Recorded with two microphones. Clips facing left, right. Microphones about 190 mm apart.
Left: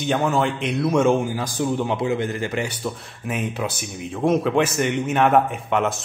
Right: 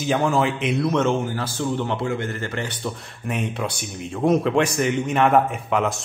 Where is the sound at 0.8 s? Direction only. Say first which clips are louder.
Left 5 dB; 10° left (ahead or behind).